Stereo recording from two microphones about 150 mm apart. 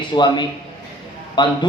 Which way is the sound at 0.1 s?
30° left (ahead or behind).